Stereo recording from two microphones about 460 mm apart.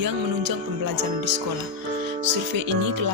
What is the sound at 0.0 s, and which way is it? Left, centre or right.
Music, right.